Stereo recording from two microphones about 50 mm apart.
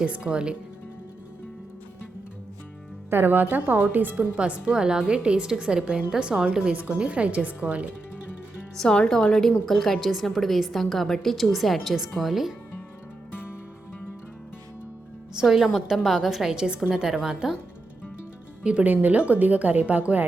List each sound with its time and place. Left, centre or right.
0.0 s a woman's voice: right
3.1 s a woman's voice: right
8.7 s a woman's voice: centre
13.3 s music: left
15.4 s a woman's voice: centre
18.6 s speech: right